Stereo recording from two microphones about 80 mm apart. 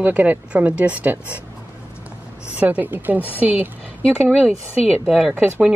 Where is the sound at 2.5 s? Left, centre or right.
Centre.